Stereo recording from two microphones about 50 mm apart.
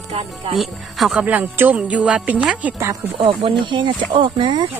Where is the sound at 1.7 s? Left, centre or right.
Right.